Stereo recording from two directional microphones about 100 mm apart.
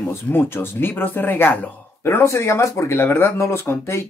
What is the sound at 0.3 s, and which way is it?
Speech, 20° left (ahead or behind).